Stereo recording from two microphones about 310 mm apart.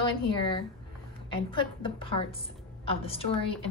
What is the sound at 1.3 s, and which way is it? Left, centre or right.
A woman's voice, centre.